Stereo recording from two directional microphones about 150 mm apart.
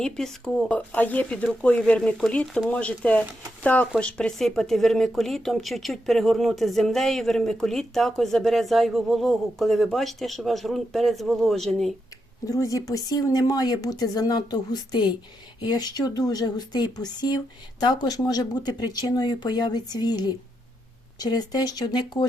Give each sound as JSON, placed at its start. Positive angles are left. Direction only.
{"t": 0.0, "sound": "speech", "side_deg": 5}
{"t": 12.5, "sound": "speech", "side_deg": 20}